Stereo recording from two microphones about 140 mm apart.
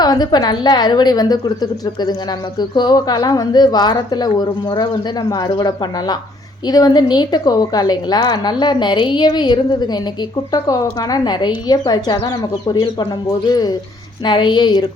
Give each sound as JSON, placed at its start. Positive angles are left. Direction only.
{"t": 0.0, "sound": "a woman's voice", "side_deg": 30}